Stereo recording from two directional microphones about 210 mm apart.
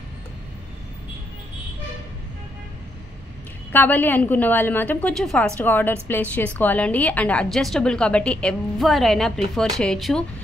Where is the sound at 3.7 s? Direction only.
10° left (ahead or behind).